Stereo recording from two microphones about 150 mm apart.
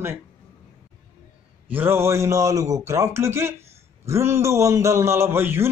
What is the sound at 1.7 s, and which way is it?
A man's voice, 15° right (ahead or behind).